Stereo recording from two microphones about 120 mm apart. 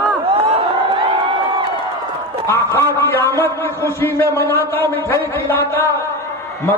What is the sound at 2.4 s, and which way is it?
A man's voice, 20° left (ahead or behind).